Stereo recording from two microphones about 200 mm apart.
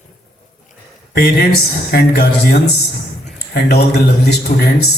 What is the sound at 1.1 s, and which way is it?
A man's voice, 55° left (ahead or behind).